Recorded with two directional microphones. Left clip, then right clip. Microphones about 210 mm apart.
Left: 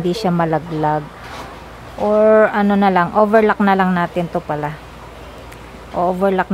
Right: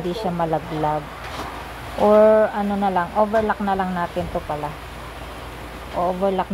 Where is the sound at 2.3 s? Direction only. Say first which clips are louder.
Left 5 dB; 40° left (ahead or behind).